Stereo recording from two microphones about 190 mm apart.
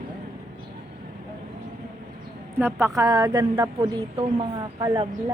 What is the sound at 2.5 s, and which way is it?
A woman's voice, 10° right (ahead or behind).